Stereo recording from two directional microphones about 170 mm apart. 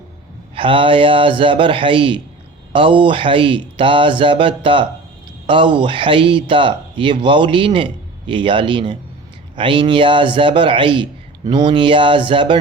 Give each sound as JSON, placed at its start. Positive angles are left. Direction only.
{"t": 0.5, "sound": "speech", "side_deg": -30}